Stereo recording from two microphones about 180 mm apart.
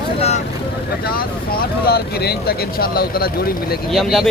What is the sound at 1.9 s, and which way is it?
Speech, 60° left (ahead or behind).